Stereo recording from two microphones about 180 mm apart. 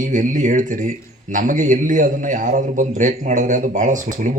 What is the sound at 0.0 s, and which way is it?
A man's voice, 45° right (ahead or behind).